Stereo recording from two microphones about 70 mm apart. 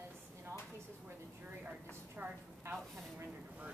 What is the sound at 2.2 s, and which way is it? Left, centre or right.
Speech, right.